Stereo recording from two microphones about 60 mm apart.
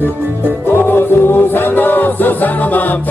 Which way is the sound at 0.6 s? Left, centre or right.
Left.